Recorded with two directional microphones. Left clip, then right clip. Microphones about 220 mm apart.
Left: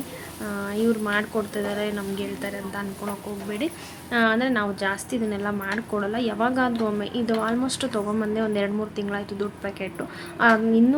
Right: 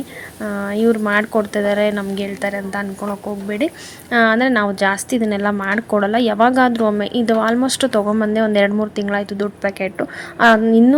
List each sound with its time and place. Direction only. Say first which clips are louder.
0.4 s a woman's voice: right 8 dB; 30° right (ahead or behind)
4.1 s a woman's voice: right 8 dB; 30° right (ahead or behind)